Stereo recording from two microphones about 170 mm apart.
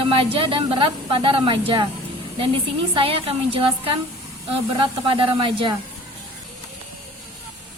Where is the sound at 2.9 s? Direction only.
35° right (ahead or behind).